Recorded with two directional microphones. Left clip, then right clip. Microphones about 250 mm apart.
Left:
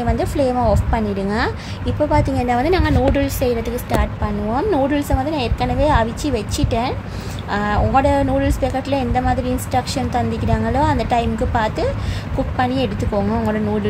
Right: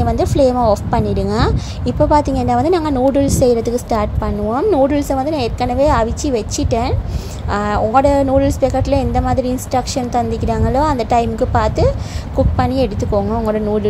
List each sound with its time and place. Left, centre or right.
0.0 s a woman's voice: centre